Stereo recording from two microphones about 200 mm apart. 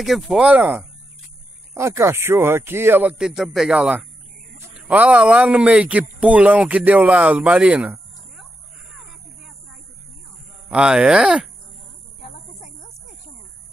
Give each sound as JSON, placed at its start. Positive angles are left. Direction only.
{"t": 0.0, "sound": "a man's voice", "side_deg": 0}
{"t": 10.7, "sound": "speech", "side_deg": -5}
{"t": 12.2, "sound": "a sound", "side_deg": 35}